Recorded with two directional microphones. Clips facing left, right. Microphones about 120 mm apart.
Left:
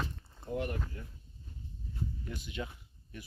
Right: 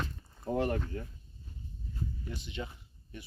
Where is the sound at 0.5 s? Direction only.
90° right.